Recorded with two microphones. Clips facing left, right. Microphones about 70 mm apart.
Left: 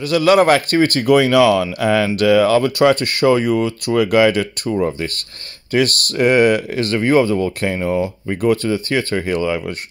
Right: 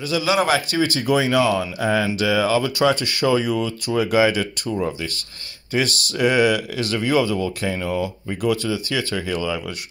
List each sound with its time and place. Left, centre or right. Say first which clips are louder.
0.0 s speech: left 7 dB; left